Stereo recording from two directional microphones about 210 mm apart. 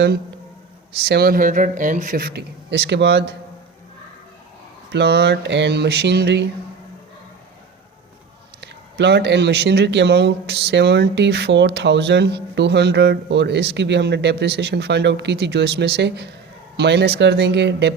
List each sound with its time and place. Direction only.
0.9 s speech: 50° right (ahead or behind)
4.9 s speech: 50° right (ahead or behind)
8.6 s speech: 55° right (ahead or behind)